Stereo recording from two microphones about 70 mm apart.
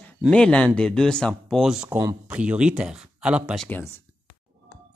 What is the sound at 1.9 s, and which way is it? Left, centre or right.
Speech, right.